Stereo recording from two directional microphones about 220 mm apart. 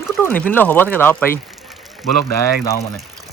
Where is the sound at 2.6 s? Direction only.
15° left (ahead or behind).